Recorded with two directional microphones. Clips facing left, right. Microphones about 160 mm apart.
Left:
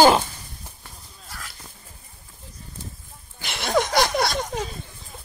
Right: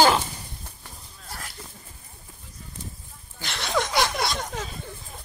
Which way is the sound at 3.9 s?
40° left (ahead or behind).